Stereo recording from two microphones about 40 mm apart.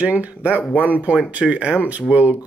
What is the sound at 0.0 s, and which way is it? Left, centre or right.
Speech, right.